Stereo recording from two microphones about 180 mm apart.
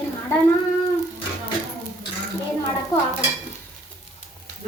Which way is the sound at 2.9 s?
20° left (ahead or behind).